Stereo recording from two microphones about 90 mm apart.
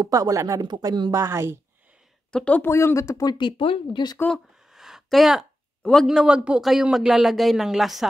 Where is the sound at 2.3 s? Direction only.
15° left (ahead or behind).